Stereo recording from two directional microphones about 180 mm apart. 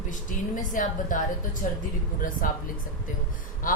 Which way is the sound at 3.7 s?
50° left (ahead or behind).